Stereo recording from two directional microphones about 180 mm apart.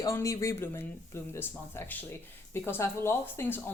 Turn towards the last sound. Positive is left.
turn(degrees=10)  # may be behind; listen again after turning